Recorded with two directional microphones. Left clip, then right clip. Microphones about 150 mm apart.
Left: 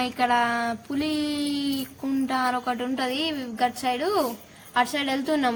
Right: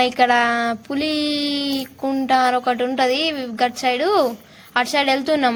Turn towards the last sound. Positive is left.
turn(degrees=-30)  # may be behind; listen again after turning